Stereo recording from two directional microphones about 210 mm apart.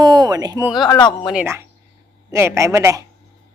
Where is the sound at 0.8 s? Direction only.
20° left (ahead or behind).